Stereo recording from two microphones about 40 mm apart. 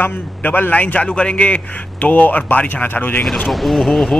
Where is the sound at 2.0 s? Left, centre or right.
Left.